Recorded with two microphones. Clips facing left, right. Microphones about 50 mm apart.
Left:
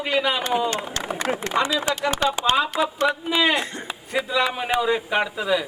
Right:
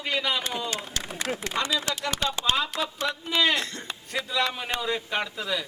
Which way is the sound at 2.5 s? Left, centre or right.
Centre.